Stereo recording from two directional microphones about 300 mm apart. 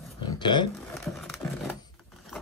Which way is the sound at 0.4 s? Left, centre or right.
Centre.